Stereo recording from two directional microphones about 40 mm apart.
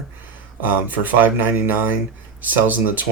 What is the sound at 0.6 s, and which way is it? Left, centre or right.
Speech, right.